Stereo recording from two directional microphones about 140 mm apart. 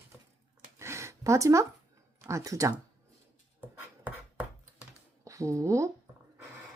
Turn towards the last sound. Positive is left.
turn(degrees=-20)  # may be behind; listen again after turning